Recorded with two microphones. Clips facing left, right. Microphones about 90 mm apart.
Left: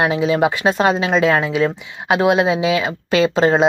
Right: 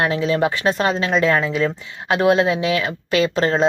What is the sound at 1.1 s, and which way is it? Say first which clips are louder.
Speech: left 2 dB; 5° left (ahead or behind).